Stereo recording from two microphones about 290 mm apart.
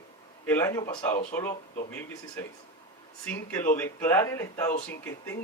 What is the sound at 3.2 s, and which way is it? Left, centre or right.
Speech, centre.